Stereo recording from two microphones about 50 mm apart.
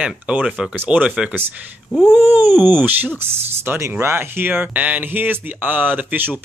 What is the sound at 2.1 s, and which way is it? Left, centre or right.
Speech, right.